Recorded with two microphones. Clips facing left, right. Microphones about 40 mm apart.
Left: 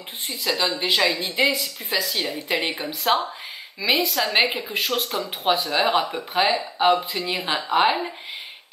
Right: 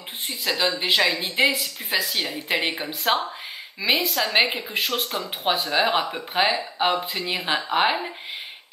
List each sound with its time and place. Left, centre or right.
0.3 s speech: centre
1.1 s a woman's voice: right
1.9 s a woman's voice: centre
7.0 s speech: right
7.4 s a woman's voice: centre